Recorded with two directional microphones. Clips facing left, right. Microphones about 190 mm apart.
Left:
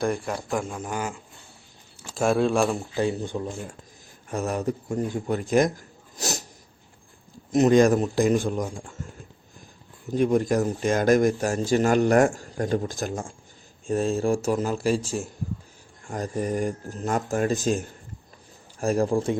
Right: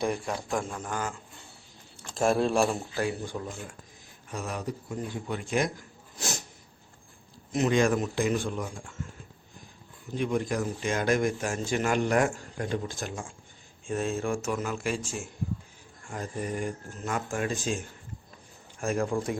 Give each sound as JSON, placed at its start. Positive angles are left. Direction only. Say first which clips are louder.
{"t": 0.0, "sound": "speech", "louder": "left 3 dB", "side_deg": 0}
{"t": 0.7, "sound": "a man's voice", "louder": "left 3 dB", "side_deg": 15}
{"t": 2.0, "sound": "speech", "louder": "left 3 dB", "side_deg": 0}
{"t": 2.9, "sound": "a man's voice", "louder": "left 5 dB", "side_deg": 20}
{"t": 4.3, "sound": "a man's voice", "louder": "left 8 dB", "side_deg": 45}
{"t": 7.5, "sound": "speech", "louder": "left 7 dB", "side_deg": 40}
{"t": 10.1, "sound": "speech", "louder": "left 7 dB", "side_deg": 40}